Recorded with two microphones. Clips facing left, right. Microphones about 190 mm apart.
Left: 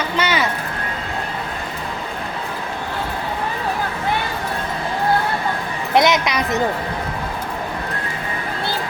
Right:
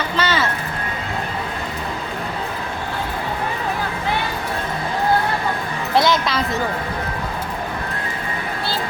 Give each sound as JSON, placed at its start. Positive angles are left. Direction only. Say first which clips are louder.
{"t": 0.2, "sound": "speech", "louder": "even", "side_deg": 15}
{"t": 5.9, "sound": "speech", "louder": "left 2 dB", "side_deg": 20}